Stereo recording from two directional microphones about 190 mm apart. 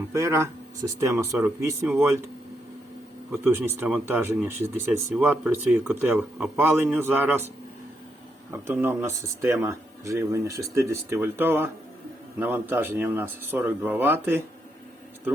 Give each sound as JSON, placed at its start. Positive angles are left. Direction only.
{"t": 0.1, "sound": "speech", "side_deg": -15}
{"t": 3.4, "sound": "speech", "side_deg": -10}
{"t": 8.4, "sound": "speech", "side_deg": -10}